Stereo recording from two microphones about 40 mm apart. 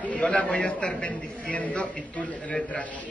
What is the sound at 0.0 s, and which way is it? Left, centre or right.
A man's voice, left.